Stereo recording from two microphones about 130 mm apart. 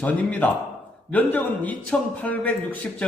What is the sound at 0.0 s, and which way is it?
A man's voice, 10° left (ahead or behind).